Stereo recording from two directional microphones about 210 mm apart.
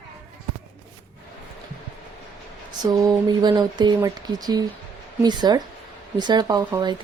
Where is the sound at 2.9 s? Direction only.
20° right (ahead or behind).